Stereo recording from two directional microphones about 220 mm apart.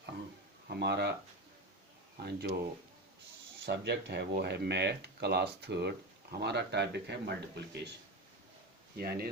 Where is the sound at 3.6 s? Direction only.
50° right (ahead or behind).